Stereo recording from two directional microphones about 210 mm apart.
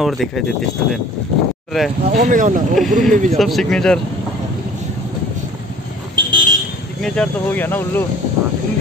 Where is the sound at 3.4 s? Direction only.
Centre (ahead or behind).